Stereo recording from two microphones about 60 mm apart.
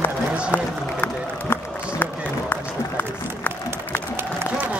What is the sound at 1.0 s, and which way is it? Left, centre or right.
Run, left.